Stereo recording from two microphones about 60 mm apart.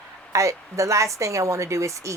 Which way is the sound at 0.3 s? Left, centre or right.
Right.